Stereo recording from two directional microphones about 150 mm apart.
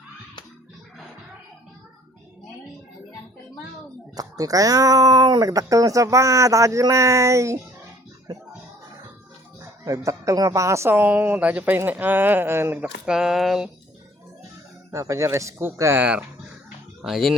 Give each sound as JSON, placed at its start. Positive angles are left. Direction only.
{"t": 4.1, "sound": "speech", "side_deg": -25}
{"t": 9.8, "sound": "speech", "side_deg": -20}
{"t": 14.8, "sound": "speech", "side_deg": -20}